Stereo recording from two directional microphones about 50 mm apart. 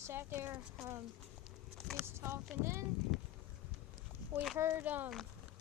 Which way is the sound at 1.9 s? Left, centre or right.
Right.